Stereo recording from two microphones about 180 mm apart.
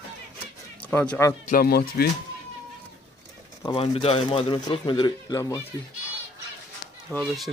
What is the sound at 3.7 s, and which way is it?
Speech, 30° left (ahead or behind).